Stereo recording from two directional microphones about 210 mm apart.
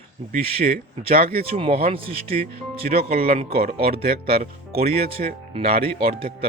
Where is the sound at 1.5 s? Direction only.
25° right (ahead or behind).